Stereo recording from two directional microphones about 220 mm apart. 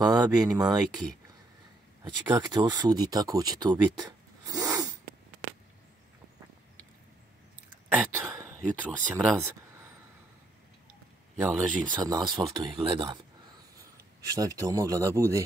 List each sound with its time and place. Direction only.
0.0 s speech: 20° right (ahead or behind)
7.9 s a sound: 10° right (ahead or behind)
9.1 s speech: 10° right (ahead or behind)
11.3 s speech: 10° right (ahead or behind)
11.8 s speech: 20° right (ahead or behind)